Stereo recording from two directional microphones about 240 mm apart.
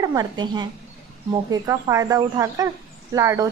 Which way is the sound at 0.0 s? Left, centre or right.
Centre.